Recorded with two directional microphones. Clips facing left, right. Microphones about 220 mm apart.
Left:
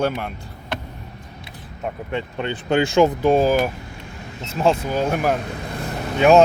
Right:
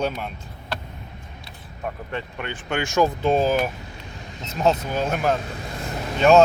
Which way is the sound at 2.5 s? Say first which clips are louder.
Left 7 dB; 35° left (ahead or behind).